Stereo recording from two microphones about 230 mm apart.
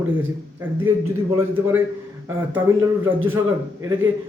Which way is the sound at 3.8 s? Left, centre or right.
Centre.